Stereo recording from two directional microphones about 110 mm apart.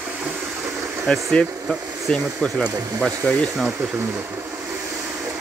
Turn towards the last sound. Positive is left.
turn(degrees=0)  # may be behind; listen again after turning